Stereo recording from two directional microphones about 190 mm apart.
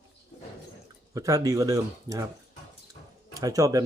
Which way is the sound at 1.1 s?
15° right (ahead or behind).